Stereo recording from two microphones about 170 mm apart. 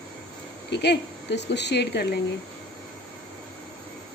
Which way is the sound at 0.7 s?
80° left.